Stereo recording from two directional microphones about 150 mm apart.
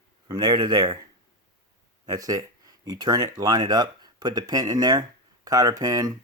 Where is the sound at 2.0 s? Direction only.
25° right (ahead or behind).